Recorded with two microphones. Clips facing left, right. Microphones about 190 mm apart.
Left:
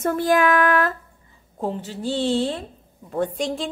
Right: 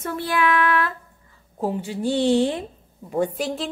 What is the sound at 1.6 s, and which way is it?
A woman's voice, 10° right (ahead or behind).